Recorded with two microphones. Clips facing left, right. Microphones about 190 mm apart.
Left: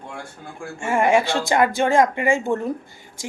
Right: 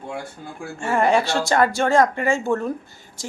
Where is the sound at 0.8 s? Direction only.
10° left (ahead or behind).